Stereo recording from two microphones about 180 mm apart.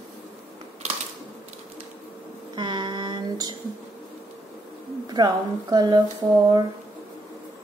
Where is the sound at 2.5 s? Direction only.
25° right (ahead or behind).